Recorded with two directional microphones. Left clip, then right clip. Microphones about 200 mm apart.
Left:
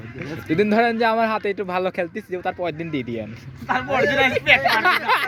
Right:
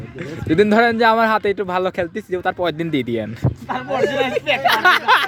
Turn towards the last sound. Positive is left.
turn(degrees=-15)  # may be behind; listen again after turning